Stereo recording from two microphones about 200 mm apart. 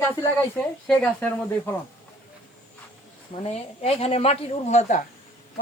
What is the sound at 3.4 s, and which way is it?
Speech, 30° left (ahead or behind).